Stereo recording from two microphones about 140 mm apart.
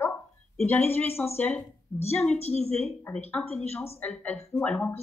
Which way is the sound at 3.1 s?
20° left (ahead or behind).